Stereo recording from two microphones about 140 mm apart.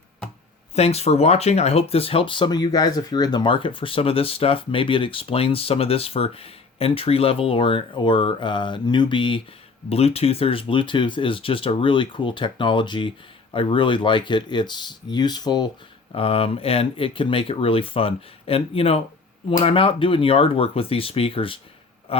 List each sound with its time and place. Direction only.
0.8 s speech: 50° left (ahead or behind)
9.9 s speech: 45° left (ahead or behind); by 15.7 s 30° left (ahead or behind)
16.1 s speech: 45° left (ahead or behind)
22.1 s a sound: 40° left (ahead or behind)